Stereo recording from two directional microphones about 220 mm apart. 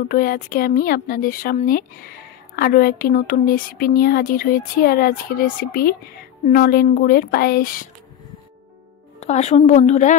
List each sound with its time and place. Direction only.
0.1 s a woman's voice: 40° left (ahead or behind)
9.2 s speech: 30° left (ahead or behind)